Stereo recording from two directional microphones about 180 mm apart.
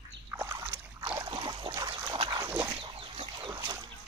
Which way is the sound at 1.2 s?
25° right (ahead or behind).